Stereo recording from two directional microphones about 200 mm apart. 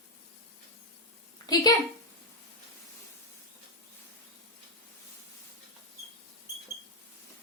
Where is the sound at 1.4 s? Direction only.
20° left (ahead or behind).